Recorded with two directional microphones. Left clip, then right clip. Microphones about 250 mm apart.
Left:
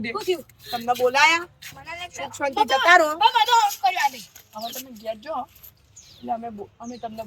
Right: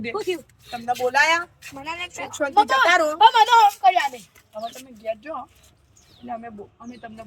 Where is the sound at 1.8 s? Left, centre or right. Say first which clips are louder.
Right 3 dB; right.